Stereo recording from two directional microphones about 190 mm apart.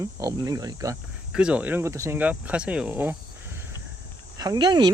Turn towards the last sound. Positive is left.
turn(degrees=-20)  # may be behind; listen again after turning